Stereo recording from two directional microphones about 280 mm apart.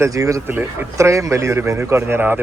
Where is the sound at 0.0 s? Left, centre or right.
Centre.